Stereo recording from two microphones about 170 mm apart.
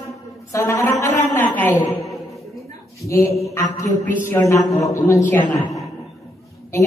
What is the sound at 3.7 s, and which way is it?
A woman's voice, 20° left (ahead or behind).